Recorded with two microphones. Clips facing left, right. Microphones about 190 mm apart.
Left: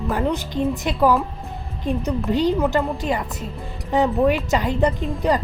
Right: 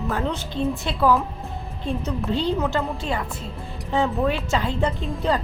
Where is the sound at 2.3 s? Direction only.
15° left (ahead or behind).